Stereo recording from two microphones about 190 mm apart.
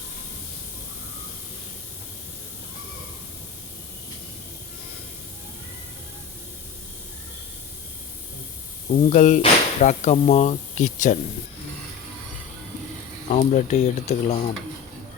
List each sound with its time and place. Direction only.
9.0 s speech: 45° left (ahead or behind)
13.3 s speech: 40° left (ahead or behind)